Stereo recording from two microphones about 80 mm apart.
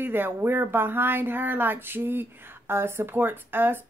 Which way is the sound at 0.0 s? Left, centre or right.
Right.